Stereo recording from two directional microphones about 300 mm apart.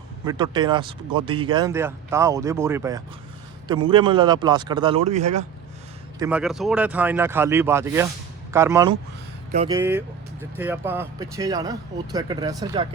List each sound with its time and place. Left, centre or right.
0.3 s speech: centre
6.1 s speech: centre